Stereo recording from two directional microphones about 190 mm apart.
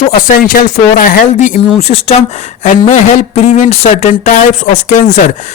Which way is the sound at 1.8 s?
30° left (ahead or behind).